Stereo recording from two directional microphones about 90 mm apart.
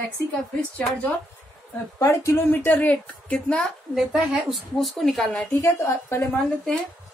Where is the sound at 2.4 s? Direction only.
20° left (ahead or behind).